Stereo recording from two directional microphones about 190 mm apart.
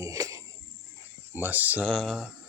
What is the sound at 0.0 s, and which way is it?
Cricket, 15° right (ahead or behind).